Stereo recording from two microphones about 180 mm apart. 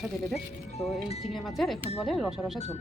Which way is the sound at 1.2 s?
Centre (ahead or behind).